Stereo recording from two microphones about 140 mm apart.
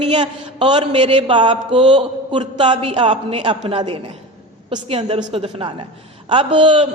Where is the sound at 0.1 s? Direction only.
35° right (ahead or behind).